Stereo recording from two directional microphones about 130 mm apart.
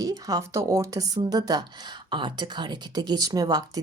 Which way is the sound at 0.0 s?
30° right (ahead or behind).